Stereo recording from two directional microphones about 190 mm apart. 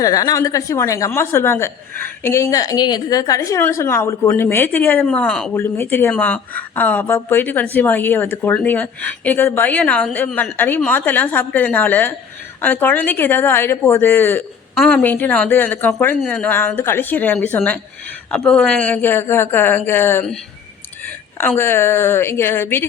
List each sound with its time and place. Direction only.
0.0 s a woman's voice: 20° left (ahead or behind)
21.4 s a woman's voice: 10° left (ahead or behind)